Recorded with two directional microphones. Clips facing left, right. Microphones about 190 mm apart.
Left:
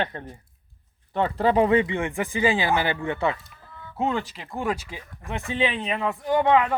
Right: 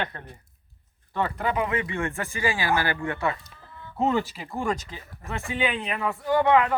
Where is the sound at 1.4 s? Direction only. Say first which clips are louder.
Left 10 dB; 30° left (ahead or behind).